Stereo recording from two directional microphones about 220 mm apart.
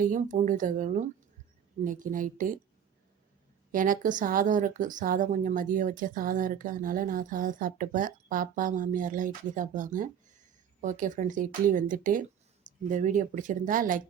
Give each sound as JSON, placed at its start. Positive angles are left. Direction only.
{"t": 0.0, "sound": "speech", "side_deg": -35}
{"t": 3.7, "sound": "speech", "side_deg": -40}